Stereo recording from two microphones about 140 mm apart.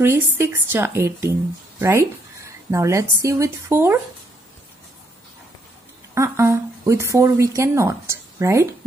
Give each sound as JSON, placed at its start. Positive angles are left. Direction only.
{"t": 0.0, "sound": "a woman's voice", "side_deg": -15}
{"t": 6.1, "sound": "a woman's voice", "side_deg": -20}